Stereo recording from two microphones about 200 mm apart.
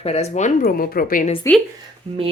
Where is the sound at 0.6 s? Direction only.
45° left (ahead or behind).